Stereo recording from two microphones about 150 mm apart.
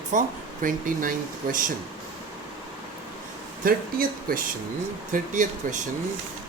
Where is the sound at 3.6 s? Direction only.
75° right (ahead or behind).